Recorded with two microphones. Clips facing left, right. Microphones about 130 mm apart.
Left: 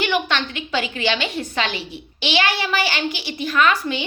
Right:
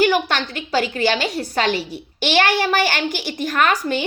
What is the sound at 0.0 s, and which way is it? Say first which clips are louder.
A woman's voice: right 4 dB; 40° right (ahead or behind).